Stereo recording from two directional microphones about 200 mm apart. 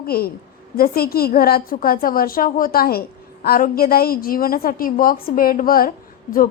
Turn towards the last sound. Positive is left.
turn(degrees=45)  # may be behind; listen again after turning